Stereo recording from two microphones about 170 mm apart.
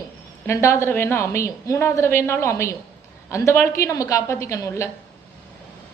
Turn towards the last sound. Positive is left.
turn(degrees=15)  # may be behind; listen again after turning